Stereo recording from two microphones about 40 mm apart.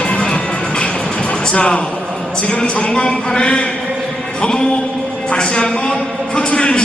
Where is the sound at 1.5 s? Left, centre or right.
Left.